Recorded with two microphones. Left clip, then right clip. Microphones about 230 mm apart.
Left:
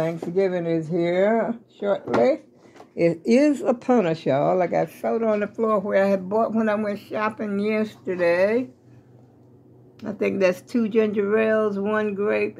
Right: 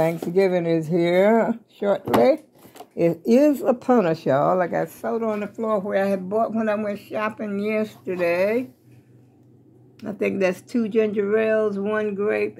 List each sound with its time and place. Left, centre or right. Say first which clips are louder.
0.3 s speech: right 1 dB; centre
3.0 s speech: right 1 dB; centre
9.9 s speech: even; centre